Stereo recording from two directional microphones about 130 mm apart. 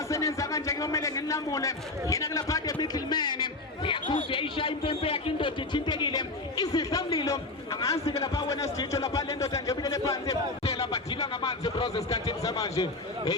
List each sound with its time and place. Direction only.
0.1 s a man's voice: 25° left (ahead or behind)
10.6 s a sound: 50° left (ahead or behind)
10.9 s a man's voice: 30° left (ahead or behind)